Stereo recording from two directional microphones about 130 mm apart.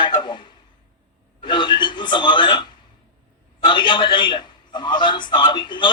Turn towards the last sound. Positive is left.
turn(degrees=35)  # may be behind; listen again after turning